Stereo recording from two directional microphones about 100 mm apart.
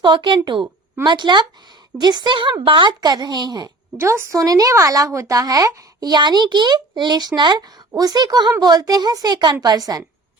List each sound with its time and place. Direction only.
0.0 s speech: 50° right (ahead or behind)
3.9 s speech: 25° right (ahead or behind)